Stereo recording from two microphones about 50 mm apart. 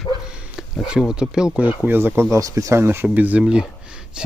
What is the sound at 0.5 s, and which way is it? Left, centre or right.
Speech, centre.